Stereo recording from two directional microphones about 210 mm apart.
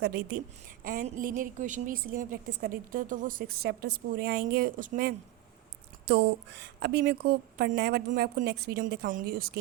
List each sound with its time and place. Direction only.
0.0 s a woman's voice: 50° right (ahead or behind)
6.1 s a woman's voice: 55° right (ahead or behind)